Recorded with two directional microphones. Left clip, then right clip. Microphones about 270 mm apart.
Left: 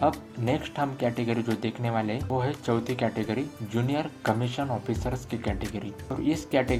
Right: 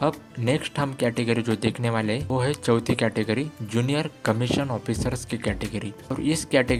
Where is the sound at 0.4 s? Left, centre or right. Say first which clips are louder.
Right 3 dB; right.